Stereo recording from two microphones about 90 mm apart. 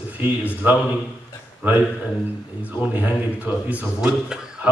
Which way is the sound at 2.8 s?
20° right (ahead or behind).